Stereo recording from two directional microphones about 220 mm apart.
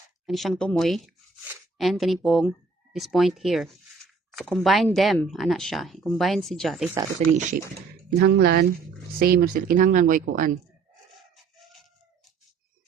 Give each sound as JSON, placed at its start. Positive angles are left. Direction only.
{"t": 0.3, "sound": "speech", "side_deg": 0}
{"t": 7.3, "sound": "speech", "side_deg": -35}
{"t": 8.1, "sound": "speech", "side_deg": -45}